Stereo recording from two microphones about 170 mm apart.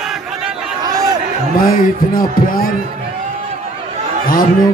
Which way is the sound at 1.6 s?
55° left (ahead or behind).